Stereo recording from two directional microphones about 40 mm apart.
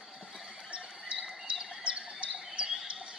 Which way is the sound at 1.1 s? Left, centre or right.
Right.